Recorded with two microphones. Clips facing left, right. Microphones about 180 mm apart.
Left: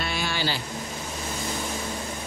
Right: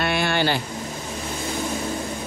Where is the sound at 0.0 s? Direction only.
60° right (ahead or behind).